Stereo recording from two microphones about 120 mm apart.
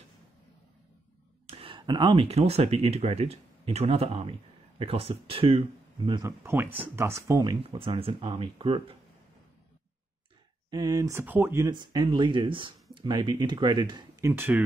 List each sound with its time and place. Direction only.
1.5 s a sound: 50° right (ahead or behind)
2.2 s speech: 60° right (ahead or behind)
6.2 s speech: 20° right (ahead or behind)
7.7 s speech: 50° right (ahead or behind)
10.7 s speech: 35° right (ahead or behind)
11.1 s speech: 20° right (ahead or behind)
11.7 s speech: 40° right (ahead or behind)
14.2 s speech: 20° right (ahead or behind)